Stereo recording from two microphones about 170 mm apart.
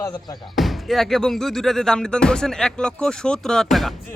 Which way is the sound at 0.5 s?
Centre (ahead or behind).